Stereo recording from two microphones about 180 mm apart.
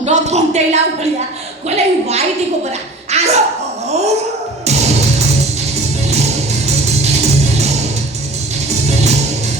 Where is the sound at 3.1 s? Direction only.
35° right (ahead or behind).